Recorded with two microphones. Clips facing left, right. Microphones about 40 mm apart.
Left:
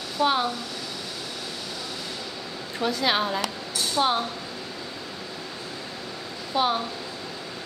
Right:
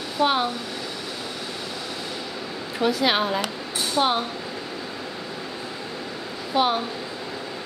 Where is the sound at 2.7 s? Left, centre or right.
Centre.